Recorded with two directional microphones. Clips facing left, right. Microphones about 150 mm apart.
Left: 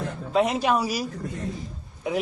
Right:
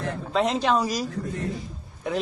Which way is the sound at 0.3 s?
10° left (ahead or behind).